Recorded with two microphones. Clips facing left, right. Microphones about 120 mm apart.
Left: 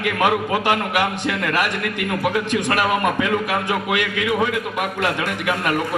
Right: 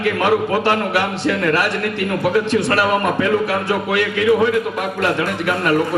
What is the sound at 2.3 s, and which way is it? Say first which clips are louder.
Speech: right 5 dB; 15° left (ahead or behind).